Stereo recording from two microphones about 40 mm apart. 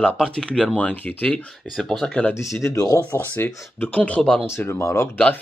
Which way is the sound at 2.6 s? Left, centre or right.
Left.